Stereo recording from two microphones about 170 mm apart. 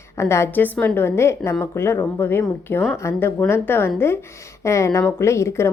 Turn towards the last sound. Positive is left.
turn(degrees=15)  # may be behind; listen again after turning